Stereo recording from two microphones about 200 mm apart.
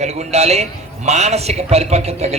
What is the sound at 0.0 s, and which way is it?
A man's voice, 35° right (ahead or behind).